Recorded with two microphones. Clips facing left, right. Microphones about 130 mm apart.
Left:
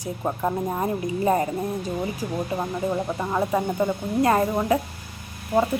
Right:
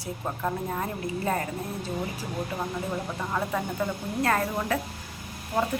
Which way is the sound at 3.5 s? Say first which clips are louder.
Left 6 dB; 20° left (ahead or behind).